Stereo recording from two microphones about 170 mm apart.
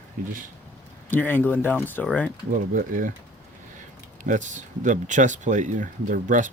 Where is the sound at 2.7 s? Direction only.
50° right (ahead or behind).